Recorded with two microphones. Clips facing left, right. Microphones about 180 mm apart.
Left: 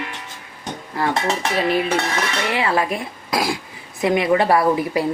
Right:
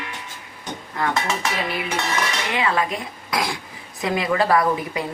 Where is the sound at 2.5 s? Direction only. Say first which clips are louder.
Left 2 dB; 30° left (ahead or behind).